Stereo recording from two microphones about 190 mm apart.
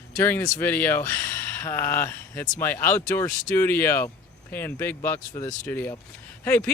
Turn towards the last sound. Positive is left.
turn(degrees=10)  # may be behind; listen again after turning